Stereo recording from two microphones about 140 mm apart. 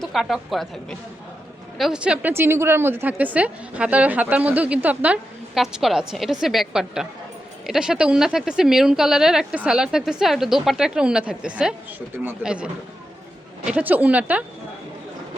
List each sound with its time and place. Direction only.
0.0 s a woman's voice: centre (ahead or behind)